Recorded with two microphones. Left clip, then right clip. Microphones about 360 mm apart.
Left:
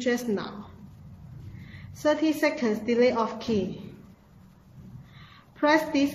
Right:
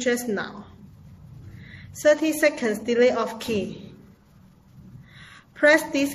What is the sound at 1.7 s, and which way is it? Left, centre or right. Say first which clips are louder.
A woman's voice: right 6 dB; right.